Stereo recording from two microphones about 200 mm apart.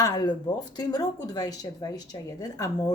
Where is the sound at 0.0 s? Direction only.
20° left (ahead or behind).